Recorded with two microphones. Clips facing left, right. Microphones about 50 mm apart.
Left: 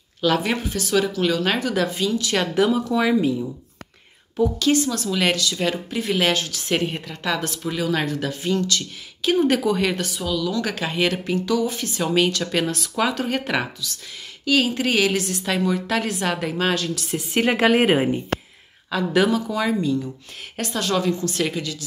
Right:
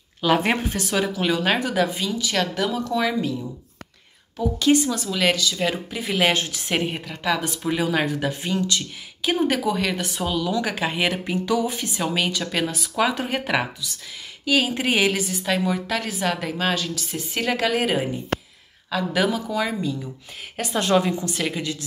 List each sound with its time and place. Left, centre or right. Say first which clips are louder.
0.4 s a woman's voice: right 1 dB; right
0.9 s speech: left 3 dB; centre
2.3 s speech: left 4 dB; centre
4.6 s speech: right 1 dB; centre
5.1 s a woman's voice: even; centre
6.3 s a woman's voice: even; right
6.9 s speech: right 1 dB; centre
9.5 s a woman's voice: left 3 dB; centre
10.1 s a woman's voice: even; right
10.6 s a woman's voice: left 1 dB; centre
17.4 s a woman's voice: left 5 dB; left
18.9 s a woman's voice: left 3 dB; centre
20.7 s a woman's voice: right 2 dB; right
21.3 s a woman's voice: left 2 dB; centre